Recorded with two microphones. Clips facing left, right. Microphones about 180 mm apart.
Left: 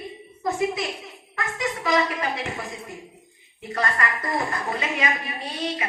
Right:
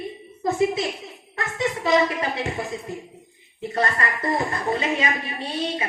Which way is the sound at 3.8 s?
30° right (ahead or behind).